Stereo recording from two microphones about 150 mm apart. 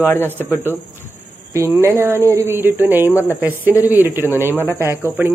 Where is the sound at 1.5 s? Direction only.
20° right (ahead or behind).